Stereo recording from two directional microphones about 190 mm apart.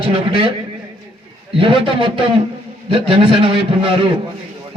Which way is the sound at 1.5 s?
25° right (ahead or behind).